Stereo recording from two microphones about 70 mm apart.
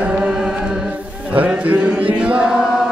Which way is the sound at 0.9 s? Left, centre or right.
Right.